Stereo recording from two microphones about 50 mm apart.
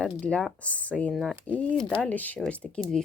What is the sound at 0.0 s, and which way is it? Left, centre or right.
Speech, centre.